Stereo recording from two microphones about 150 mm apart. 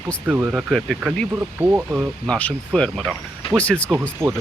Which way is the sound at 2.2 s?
5° left (ahead or behind).